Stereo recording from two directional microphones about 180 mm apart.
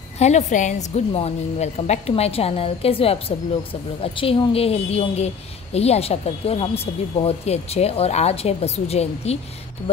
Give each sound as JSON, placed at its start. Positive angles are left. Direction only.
{"t": 0.2, "sound": "a woman's voice", "side_deg": 40}